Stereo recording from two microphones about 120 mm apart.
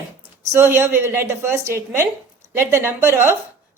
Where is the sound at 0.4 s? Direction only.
20° right (ahead or behind).